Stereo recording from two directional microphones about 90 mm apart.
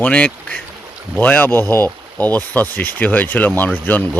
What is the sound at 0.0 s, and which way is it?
Speech, 15° left (ahead or behind).